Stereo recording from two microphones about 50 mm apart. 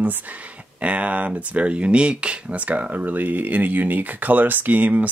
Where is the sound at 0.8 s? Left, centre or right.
Right.